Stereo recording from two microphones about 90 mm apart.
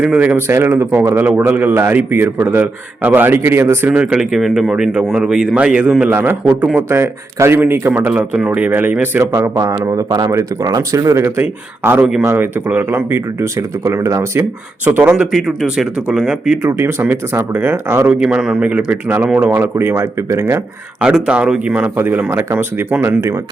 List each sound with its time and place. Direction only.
0.0 s a man's voice: 15° right (ahead or behind)
3.9 s a man's voice: 10° right (ahead or behind); by 8.1 s 25° right (ahead or behind)
8.1 s speech: 15° right (ahead or behind)
9.6 s a man's voice: 45° right (ahead or behind)
14.8 s a man's voice: 20° right (ahead or behind)
15.1 s speech: 5° right (ahead or behind)
16.6 s a man's voice: 25° right (ahead or behind)
18.1 s speech: 10° right (ahead or behind); by 20.6 s 30° right (ahead or behind)
21.0 s a man's voice: 10° right (ahead or behind)